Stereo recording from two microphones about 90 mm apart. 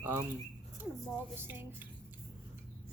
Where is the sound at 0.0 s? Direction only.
30° right (ahead or behind).